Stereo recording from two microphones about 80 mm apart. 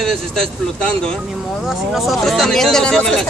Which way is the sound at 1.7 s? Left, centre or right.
Centre.